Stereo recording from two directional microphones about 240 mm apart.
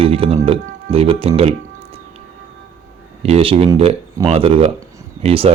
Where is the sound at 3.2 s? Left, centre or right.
Right.